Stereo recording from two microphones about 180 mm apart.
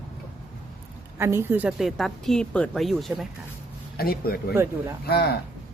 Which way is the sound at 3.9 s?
55° left (ahead or behind).